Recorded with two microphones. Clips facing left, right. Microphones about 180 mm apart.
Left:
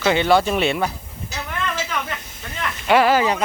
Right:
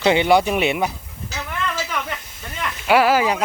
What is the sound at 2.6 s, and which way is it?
Speech, 5° right (ahead or behind).